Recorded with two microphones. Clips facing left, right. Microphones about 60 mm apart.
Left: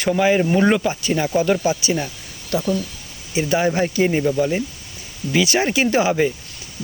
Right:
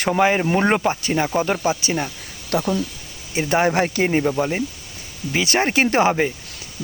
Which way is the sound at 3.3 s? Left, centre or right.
Right.